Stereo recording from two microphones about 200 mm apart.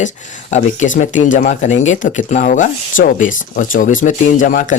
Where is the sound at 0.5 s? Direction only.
40° left (ahead or behind).